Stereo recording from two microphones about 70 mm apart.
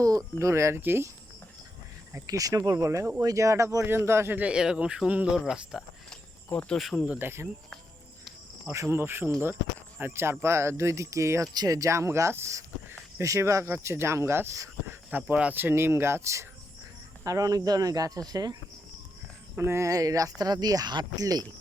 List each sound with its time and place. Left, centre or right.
0.0 s speech: right
2.2 s speech: right
4.4 s speech: centre
7.2 s speech: right
8.7 s speech: right
14.8 s speech: right
17.2 s speech: right
19.5 s speech: right
19.9 s speech: right